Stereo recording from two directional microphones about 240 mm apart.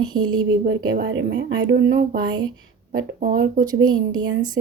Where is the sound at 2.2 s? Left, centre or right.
Centre.